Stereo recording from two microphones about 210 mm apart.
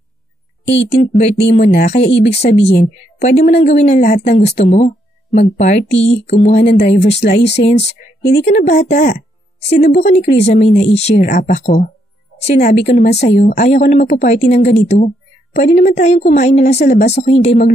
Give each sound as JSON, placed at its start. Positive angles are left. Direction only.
{"t": 0.9, "sound": "a woman's voice", "side_deg": 30}
{"t": 1.4, "sound": "speech", "side_deg": 50}
{"t": 3.2, "sound": "a woman's voice", "side_deg": 35}
{"t": 5.7, "sound": "speech", "side_deg": 30}
{"t": 6.5, "sound": "speech", "side_deg": 50}
{"t": 6.8, "sound": "a woman's voice", "side_deg": 30}
{"t": 7.2, "sound": "speech", "side_deg": 55}
{"t": 7.6, "sound": "a woman's voice", "side_deg": 30}
{"t": 16.8, "sound": "speech", "side_deg": 50}
{"t": 17.1, "sound": "a woman's voice", "side_deg": 30}